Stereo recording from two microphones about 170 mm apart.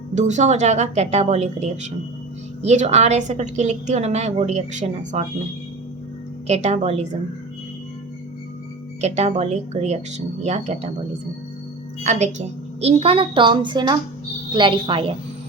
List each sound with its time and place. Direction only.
0.1 s a woman's voice: 45° right (ahead or behind)
6.5 s a woman's voice: 40° right (ahead or behind)
9.0 s a woman's voice: 40° right (ahead or behind)
12.0 s a woman's voice: 45° right (ahead or behind)